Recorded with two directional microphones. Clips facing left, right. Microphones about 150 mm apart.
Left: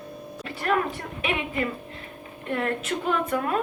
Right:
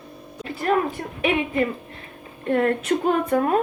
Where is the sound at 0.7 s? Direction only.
40° right (ahead or behind).